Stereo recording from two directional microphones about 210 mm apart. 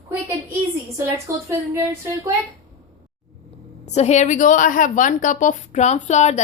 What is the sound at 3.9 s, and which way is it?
A woman's voice, 30° left (ahead or behind).